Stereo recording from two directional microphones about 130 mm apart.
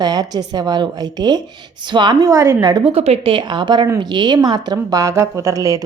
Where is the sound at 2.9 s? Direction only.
50° right (ahead or behind).